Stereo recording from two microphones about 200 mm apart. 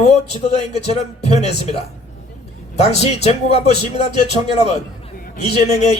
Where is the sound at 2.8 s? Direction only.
30° left (ahead or behind).